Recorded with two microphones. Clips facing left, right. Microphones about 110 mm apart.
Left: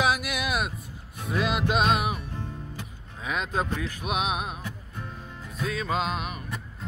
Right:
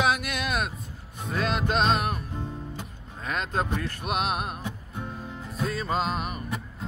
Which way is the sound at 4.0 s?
Centre (ahead or behind).